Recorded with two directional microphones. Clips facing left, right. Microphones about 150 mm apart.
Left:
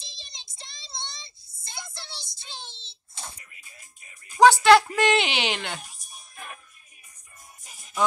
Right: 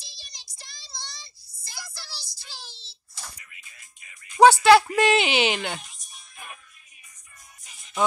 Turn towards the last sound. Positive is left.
turn(degrees=45)  # may be behind; listen again after turning